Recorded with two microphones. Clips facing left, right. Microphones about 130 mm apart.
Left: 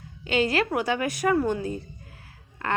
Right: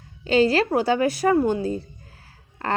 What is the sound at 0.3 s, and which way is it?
A woman's voice, 35° right (ahead or behind).